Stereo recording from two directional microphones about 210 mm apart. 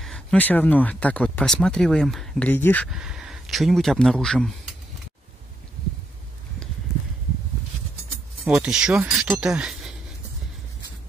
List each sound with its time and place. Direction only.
0.0 s speech: 5° left (ahead or behind)
8.5 s speech: 5° right (ahead or behind)